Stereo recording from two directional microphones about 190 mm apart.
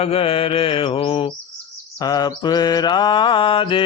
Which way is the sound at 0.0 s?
30° left (ahead or behind).